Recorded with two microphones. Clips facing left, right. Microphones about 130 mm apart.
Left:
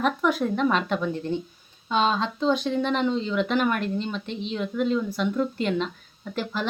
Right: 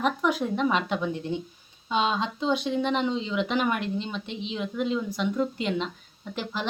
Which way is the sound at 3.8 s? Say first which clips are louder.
Left 2 dB; 50° left (ahead or behind).